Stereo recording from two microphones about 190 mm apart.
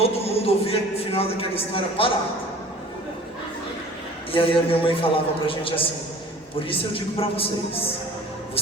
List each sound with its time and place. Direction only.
0.0 s a man's voice: 30° left (ahead or behind)
4.3 s a man's voice: 30° left (ahead or behind)